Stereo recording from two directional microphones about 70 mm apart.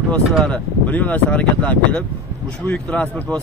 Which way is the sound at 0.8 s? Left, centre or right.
Left.